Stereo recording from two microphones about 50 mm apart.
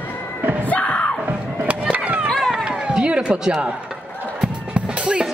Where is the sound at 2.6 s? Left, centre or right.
Centre.